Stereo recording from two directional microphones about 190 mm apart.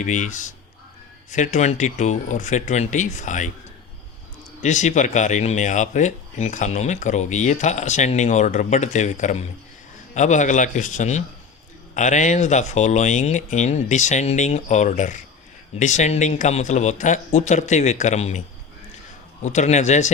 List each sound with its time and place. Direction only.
0.0 s speech: 40° left (ahead or behind)
4.6 s speech: 40° left (ahead or behind)